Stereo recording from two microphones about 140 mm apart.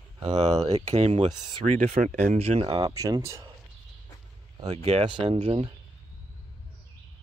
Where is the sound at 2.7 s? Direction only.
25° right (ahead or behind).